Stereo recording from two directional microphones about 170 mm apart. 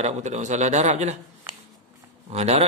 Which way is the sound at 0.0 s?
45° right (ahead or behind).